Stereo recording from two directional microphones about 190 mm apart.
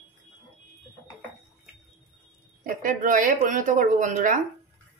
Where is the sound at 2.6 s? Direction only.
45° right (ahead or behind).